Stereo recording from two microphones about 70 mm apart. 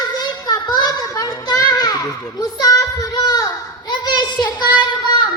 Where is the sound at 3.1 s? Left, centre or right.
Left.